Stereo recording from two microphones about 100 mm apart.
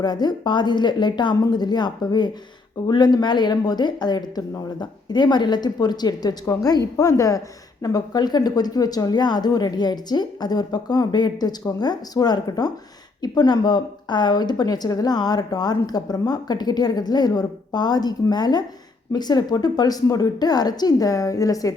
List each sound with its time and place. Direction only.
0.0 s a woman's voice: 45° left (ahead or behind)